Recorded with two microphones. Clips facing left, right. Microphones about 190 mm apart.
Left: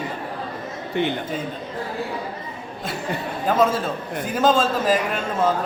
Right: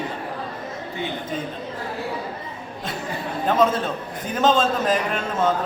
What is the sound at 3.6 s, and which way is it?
A man's voice, 5° left (ahead or behind).